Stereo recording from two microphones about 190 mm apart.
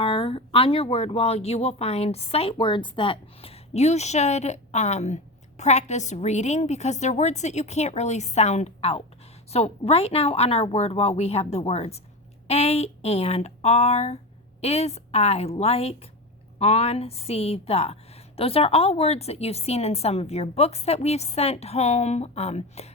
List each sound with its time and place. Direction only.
0.0 s speech: 30° left (ahead or behind)